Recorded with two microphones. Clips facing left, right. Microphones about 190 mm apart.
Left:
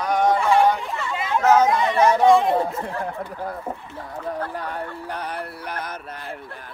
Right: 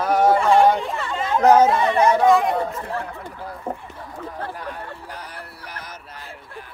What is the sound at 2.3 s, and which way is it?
Speech, 30° left (ahead or behind).